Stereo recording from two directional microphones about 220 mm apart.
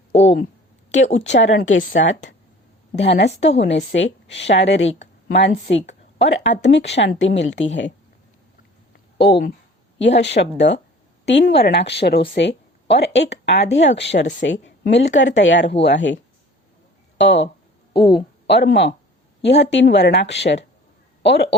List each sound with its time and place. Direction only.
0.9 s speech: 60° left (ahead or behind)
9.1 s speech: 50° left (ahead or behind)
17.2 s speech: 55° left (ahead or behind)